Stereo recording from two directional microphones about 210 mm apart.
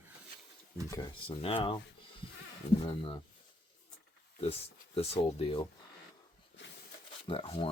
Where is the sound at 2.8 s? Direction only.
25° left (ahead or behind).